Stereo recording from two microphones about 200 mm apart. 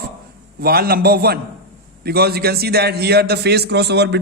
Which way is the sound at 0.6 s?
50° right (ahead or behind).